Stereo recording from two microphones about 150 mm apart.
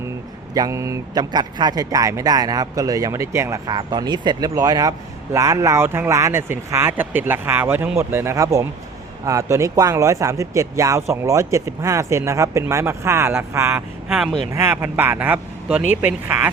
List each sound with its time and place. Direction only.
0.5 s speech: 25° right (ahead or behind)
14.1 s speech: 5° right (ahead or behind)
14.5 s speech: 15° right (ahead or behind)